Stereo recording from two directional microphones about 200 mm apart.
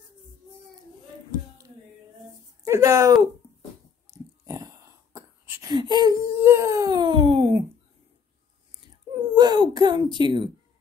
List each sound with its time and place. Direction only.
2.6 s speech: 15° right (ahead or behind)
4.1 s a sound: 15° right (ahead or behind)
9.3 s whimper: 20° right (ahead or behind)
10.1 s speech: 25° right (ahead or behind)